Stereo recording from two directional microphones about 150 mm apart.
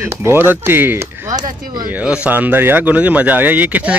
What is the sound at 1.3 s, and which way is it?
Speech, 65° right (ahead or behind).